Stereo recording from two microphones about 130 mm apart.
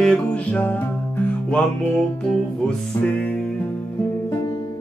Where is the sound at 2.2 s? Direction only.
10° left (ahead or behind).